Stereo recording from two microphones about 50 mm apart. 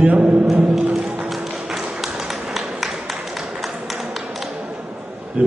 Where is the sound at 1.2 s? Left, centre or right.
Centre.